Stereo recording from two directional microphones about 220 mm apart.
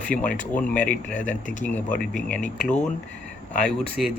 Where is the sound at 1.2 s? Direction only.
35° left (ahead or behind).